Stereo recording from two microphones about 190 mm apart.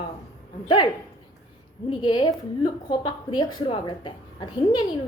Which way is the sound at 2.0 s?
25° left (ahead or behind).